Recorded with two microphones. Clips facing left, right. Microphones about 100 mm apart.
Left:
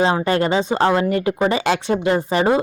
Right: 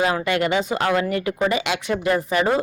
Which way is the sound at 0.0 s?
30° left (ahead or behind).